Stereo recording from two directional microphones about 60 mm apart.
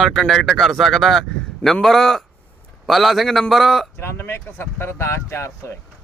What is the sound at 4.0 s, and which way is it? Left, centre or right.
Speech, left.